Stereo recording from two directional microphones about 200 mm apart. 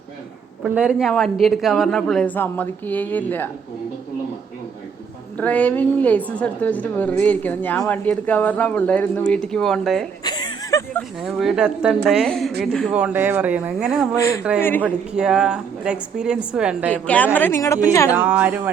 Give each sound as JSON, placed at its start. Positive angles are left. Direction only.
{"t": 0.6, "sound": "a woman's voice", "side_deg": -5}
{"t": 5.4, "sound": "a woman's voice", "side_deg": 5}
{"t": 10.2, "sound": "a sound", "side_deg": 20}
{"t": 11.2, "sound": "a woman's voice", "side_deg": 0}
{"t": 14.6, "sound": "a woman's voice", "side_deg": 10}
{"t": 15.1, "sound": "a woman's voice", "side_deg": -5}
{"t": 16.9, "sound": "a woman's voice", "side_deg": 5}
{"t": 18.1, "sound": "speech", "side_deg": -10}